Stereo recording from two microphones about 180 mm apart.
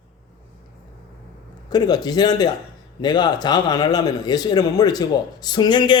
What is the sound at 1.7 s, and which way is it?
Speech, 20° left (ahead or behind).